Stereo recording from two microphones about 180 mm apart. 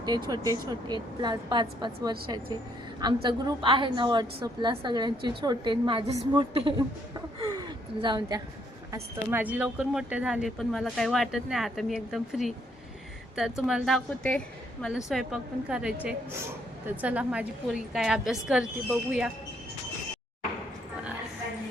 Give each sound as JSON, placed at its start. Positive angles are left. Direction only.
{"t": 0.7, "sound": "a woman's voice", "side_deg": -25}
{"t": 8.9, "sound": "a woman's voice", "side_deg": -10}